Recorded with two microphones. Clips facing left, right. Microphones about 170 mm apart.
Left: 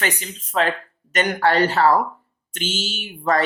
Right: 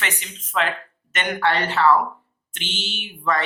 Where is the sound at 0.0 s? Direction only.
40° left (ahead or behind).